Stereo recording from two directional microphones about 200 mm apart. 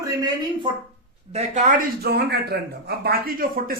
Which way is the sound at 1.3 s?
35° right (ahead or behind).